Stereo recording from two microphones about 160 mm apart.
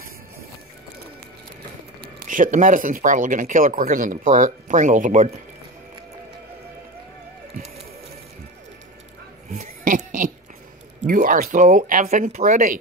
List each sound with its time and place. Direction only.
2.2 s speech: 55° right (ahead or behind)
9.6 s a sound: 55° right (ahead or behind)
11.1 s speech: 55° right (ahead or behind)